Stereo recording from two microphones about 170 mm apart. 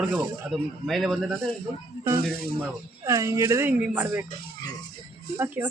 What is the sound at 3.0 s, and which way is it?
Speech, 15° right (ahead or behind).